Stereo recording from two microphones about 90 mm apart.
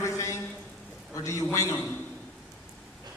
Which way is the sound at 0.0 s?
35° left (ahead or behind).